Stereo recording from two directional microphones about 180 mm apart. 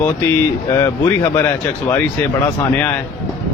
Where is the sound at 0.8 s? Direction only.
15° left (ahead or behind).